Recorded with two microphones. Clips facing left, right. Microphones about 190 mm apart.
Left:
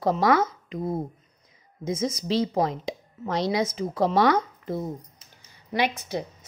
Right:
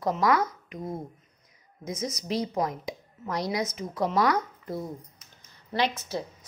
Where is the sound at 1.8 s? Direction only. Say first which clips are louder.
Left 5 dB; 30° left (ahead or behind).